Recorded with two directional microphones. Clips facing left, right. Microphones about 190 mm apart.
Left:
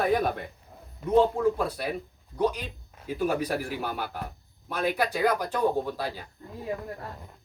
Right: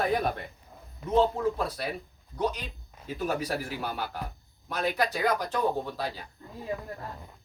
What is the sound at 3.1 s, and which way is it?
Speech, 10° left (ahead or behind).